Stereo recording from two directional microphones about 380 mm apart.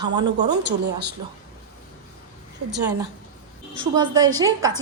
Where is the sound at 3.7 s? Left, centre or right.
Centre.